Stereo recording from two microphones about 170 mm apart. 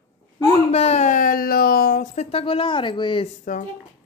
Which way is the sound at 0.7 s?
40° left (ahead or behind).